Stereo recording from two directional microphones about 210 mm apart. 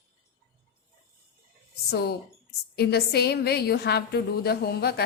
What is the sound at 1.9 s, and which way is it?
A woman's voice, 50° left (ahead or behind).